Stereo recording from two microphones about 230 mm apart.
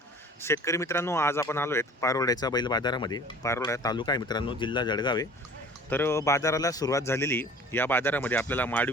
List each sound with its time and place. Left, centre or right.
0.4 s speech: centre